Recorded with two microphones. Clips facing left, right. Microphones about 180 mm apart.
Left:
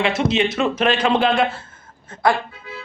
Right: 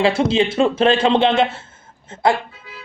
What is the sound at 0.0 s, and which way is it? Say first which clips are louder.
A man's voice: right 3 dB; 30° right (ahead or behind).